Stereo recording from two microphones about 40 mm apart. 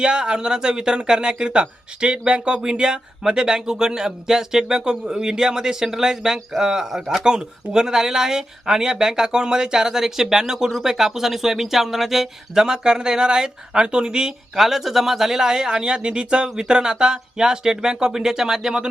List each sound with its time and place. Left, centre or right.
0.0 s speech: right; by 12.6 s centre
12.6 s speech: centre
14.6 s speech: centre